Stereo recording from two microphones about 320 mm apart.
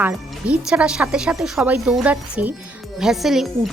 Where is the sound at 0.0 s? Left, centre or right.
Centre.